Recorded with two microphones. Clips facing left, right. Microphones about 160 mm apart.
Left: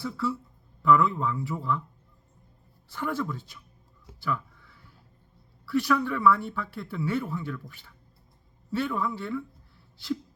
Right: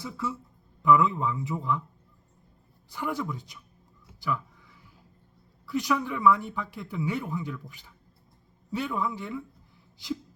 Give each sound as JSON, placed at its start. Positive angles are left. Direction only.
{"t": 0.0, "sound": "speech", "side_deg": -20}
{"t": 2.9, "sound": "speech", "side_deg": -15}
{"t": 4.2, "sound": "a sound", "side_deg": -15}
{"t": 5.6, "sound": "speech", "side_deg": -15}